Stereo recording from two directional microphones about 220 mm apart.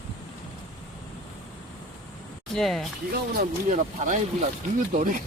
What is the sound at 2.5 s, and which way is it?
Speech, centre (ahead or behind).